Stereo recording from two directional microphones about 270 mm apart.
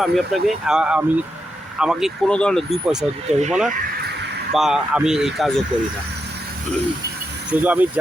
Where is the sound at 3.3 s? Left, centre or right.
Right.